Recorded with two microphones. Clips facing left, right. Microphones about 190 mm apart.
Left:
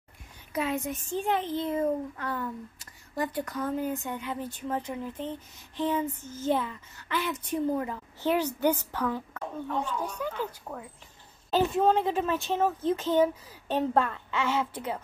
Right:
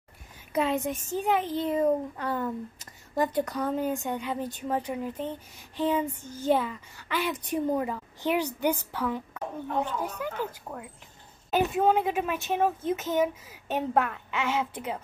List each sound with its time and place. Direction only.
0.5 s speech: 25° right (ahead or behind)
1.1 s a child's voice: 15° right (ahead or behind)